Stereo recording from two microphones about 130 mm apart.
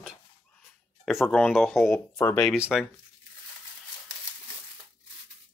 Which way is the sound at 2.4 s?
5° right (ahead or behind).